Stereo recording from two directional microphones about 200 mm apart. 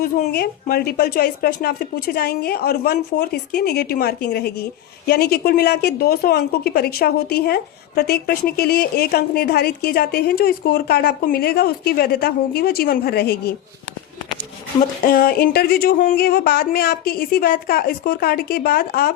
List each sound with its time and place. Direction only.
0.0 s speech: 50° left (ahead or behind)
15.0 s speech: 45° left (ahead or behind)